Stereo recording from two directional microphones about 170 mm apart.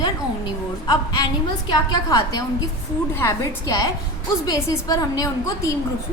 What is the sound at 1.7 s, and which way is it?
A woman's voice, 20° left (ahead or behind).